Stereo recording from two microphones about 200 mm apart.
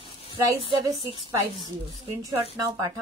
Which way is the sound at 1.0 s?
30° left (ahead or behind).